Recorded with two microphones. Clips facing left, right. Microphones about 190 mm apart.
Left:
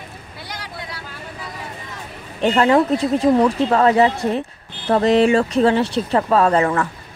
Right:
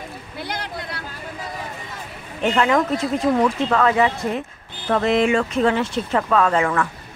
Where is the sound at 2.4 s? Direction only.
35° left (ahead or behind).